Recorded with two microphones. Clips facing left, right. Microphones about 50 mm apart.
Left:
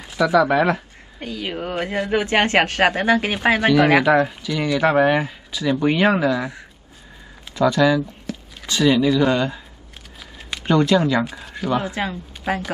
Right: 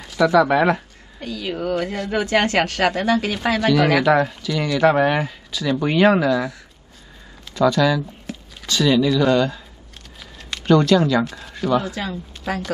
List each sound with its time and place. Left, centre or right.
0.4 s speech: centre
1.2 s a woman's voice: left; by 5.3 s centre
5.5 s a woman's voice: centre
5.9 s speech: centre
7.6 s speech: centre
8.3 s a sound: centre
8.6 s speech: centre
11.7 s a woman's voice: left